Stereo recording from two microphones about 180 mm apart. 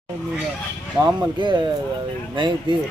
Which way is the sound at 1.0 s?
25° right (ahead or behind).